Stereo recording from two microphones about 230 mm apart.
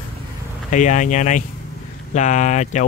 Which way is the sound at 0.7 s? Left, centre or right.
Left.